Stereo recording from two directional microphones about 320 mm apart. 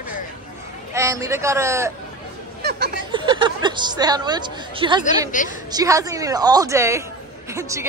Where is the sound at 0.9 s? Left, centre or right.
Centre.